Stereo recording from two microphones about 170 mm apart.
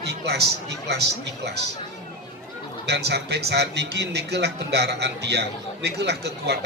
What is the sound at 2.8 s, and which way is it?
Speech, 75° right (ahead or behind).